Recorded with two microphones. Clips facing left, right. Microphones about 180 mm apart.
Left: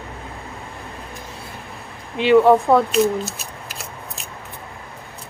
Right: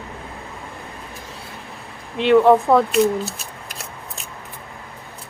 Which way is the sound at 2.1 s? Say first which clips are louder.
Even; centre (ahead or behind).